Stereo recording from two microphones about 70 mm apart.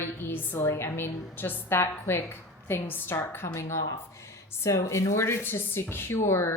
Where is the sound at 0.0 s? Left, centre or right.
Left.